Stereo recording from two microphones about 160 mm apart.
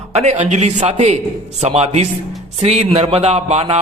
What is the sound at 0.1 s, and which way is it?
A man's voice, 45° right (ahead or behind).